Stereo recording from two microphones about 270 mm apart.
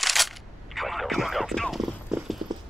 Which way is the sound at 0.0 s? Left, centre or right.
Centre.